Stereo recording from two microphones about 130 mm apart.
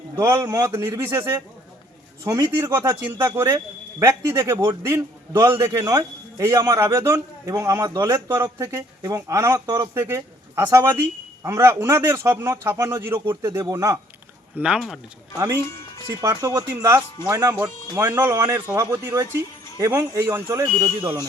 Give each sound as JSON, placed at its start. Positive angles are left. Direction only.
{"t": 0.2, "sound": "a man's voice", "side_deg": -20}
{"t": 2.2, "sound": "a man's voice", "side_deg": -25}
{"t": 14.6, "sound": "speech", "side_deg": -5}
{"t": 15.5, "sound": "speech", "side_deg": 20}
{"t": 16.0, "sound": "a man's voice", "side_deg": -25}